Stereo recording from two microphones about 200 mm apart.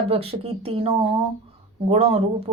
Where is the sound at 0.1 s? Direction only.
30° right (ahead or behind).